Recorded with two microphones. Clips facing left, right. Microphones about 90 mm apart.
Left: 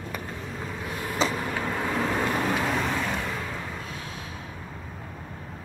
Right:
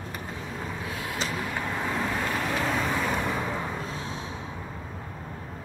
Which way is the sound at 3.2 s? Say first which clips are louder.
Right 3 dB; 15° right (ahead or behind).